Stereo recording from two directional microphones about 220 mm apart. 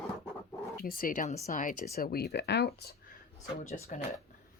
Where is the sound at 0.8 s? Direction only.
40° left (ahead or behind).